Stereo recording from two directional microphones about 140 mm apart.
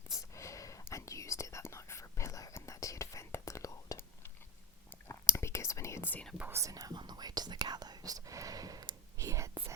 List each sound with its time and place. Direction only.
0.3 s whispering: 20° left (ahead or behind)
6.3 s speech: 10° right (ahead or behind)
6.6 s whispering: 25° right (ahead or behind)